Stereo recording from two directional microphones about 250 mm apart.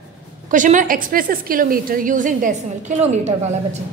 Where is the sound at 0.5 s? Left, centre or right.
Right.